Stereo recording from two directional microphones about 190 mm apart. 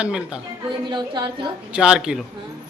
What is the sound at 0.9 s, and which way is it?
Speech, 25° right (ahead or behind).